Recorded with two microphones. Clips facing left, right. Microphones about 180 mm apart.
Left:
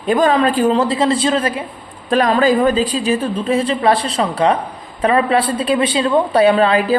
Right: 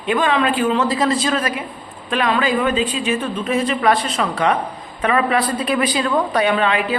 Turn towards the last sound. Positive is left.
turn(degrees=35)  # may be behind; listen again after turning